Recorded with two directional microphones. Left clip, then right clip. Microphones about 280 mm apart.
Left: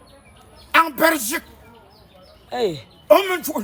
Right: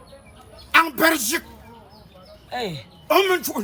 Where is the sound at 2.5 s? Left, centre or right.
Centre.